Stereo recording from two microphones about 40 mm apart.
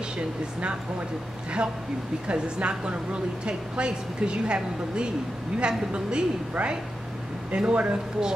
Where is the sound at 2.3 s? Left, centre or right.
Right.